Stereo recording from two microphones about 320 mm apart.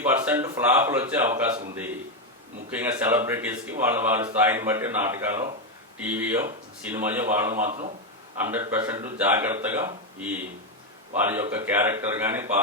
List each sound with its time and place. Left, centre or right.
0.1 s a man's voice: centre
2.6 s a man's voice: centre
7.7 s speech: right
8.4 s a man's voice: centre